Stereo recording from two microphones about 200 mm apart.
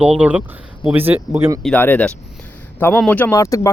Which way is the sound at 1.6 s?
5° left (ahead or behind).